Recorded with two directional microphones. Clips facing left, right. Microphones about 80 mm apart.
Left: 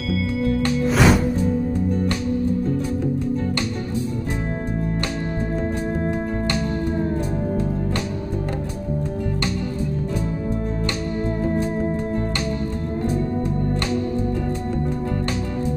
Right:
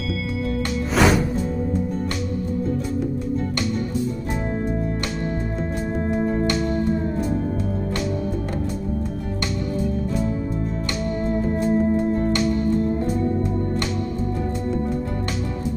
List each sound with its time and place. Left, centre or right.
0.1 s music: centre
5.9 s music: left